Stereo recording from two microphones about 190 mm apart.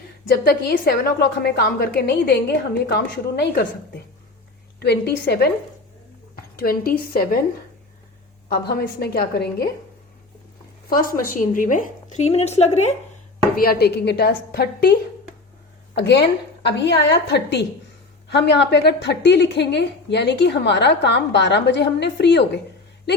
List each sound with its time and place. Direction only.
0.4 s a woman's voice: 55° left (ahead or behind)
6.6 s a woman's voice: 50° left (ahead or behind)
8.4 s a woman's voice: 55° left (ahead or behind)
10.8 s a woman's voice: 50° left (ahead or behind); by 12.9 s 35° left (ahead or behind)
13.6 s a woman's voice: 55° left (ahead or behind)
16.0 s a woman's voice: 60° left (ahead or behind)